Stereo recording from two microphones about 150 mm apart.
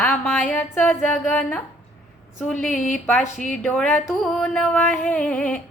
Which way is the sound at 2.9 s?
55° left (ahead or behind).